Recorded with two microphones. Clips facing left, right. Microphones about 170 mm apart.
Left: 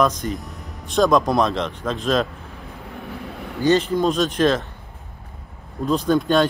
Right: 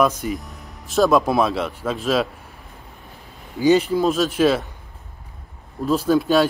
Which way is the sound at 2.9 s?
75° left (ahead or behind).